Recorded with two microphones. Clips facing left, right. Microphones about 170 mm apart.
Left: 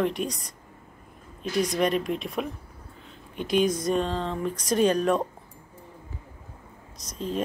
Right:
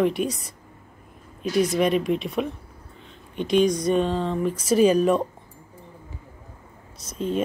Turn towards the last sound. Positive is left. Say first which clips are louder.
# right 5 dB
turn(degrees=-5)  # may be behind; listen again after turning